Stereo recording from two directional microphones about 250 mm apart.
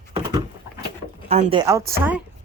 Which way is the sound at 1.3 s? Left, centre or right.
Right.